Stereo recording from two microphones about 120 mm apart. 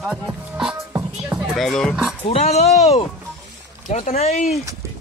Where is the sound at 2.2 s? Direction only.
60° left (ahead or behind).